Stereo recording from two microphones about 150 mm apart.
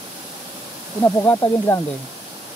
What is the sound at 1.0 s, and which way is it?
Speech, 20° left (ahead or behind).